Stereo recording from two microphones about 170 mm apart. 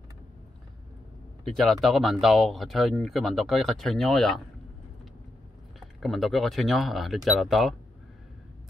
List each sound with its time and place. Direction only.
1.4 s speech: centre (ahead or behind)
5.8 s speech: centre (ahead or behind)